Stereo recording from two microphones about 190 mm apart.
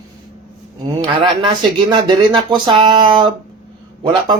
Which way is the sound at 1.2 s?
25° right (ahead or behind).